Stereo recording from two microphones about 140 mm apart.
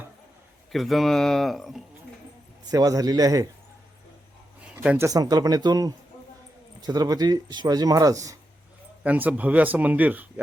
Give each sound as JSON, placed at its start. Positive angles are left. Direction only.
{"t": 0.7, "sound": "speech", "side_deg": 0}
{"t": 2.6, "sound": "speech", "side_deg": -25}
{"t": 4.6, "sound": "a sound", "side_deg": -10}
{"t": 5.0, "sound": "speech", "side_deg": -25}
{"t": 9.0, "sound": "speech", "side_deg": -10}